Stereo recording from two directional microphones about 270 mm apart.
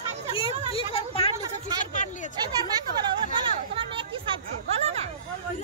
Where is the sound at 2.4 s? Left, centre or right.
Centre.